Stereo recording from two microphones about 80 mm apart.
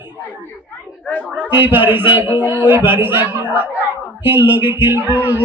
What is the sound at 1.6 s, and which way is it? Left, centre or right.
A man's voice, right.